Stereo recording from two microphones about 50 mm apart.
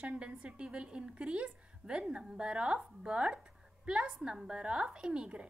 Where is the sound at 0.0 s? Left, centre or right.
Right.